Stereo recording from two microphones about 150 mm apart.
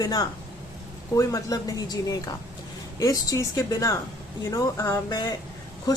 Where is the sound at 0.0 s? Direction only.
25° left (ahead or behind).